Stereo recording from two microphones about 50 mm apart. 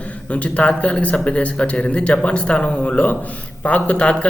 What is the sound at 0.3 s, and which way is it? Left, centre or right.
Speech, left.